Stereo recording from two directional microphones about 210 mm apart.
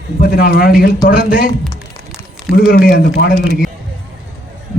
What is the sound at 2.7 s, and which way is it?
Speech, 50° left (ahead or behind).